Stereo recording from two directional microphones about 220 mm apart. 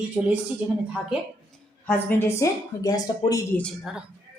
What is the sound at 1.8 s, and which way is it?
A woman's voice, 10° left (ahead or behind).